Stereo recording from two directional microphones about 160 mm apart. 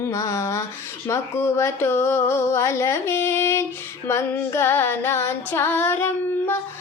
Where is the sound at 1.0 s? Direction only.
15° left (ahead or behind).